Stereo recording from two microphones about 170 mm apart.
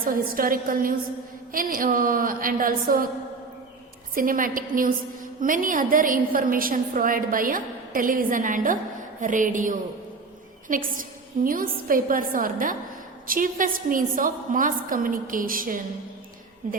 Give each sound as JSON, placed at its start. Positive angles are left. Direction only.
{"t": 0.0, "sound": "a woman's voice", "side_deg": -55}
{"t": 4.1, "sound": "a woman's voice", "side_deg": -55}